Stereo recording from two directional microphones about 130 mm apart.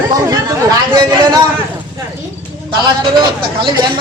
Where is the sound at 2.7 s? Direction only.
40° right (ahead or behind).